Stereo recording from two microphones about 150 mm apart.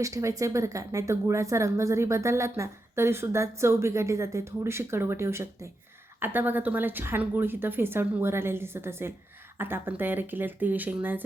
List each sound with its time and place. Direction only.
0.0 s a woman's voice: 20° right (ahead or behind)